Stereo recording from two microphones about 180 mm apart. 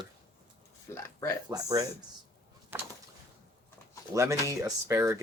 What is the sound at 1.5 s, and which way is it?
Speech, 20° right (ahead or behind).